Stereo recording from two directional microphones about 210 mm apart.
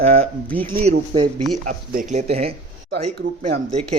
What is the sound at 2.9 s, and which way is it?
Speech, 50° right (ahead or behind).